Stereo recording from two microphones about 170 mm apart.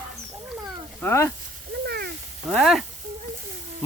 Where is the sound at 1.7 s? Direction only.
70° right (ahead or behind).